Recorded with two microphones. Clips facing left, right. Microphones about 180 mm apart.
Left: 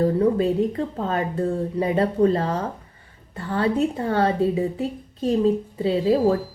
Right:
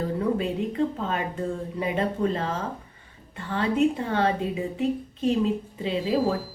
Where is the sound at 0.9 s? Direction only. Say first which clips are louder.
Left 5 dB; 40° left (ahead or behind).